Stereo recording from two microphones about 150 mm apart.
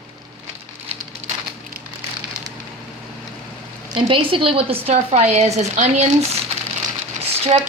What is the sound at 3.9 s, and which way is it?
Speech, 35° right (ahead or behind).